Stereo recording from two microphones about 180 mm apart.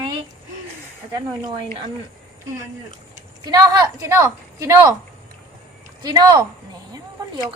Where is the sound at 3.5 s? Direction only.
20° right (ahead or behind).